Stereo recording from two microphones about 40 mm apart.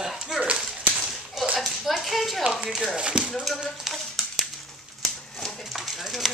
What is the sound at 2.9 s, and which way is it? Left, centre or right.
Speech, right.